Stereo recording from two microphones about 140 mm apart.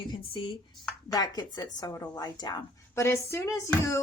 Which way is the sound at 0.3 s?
35° left (ahead or behind).